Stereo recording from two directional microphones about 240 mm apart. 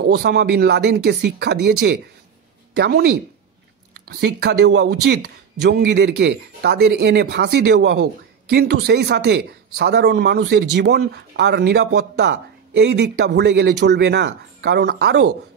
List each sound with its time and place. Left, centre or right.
0.0 s a man's voice: right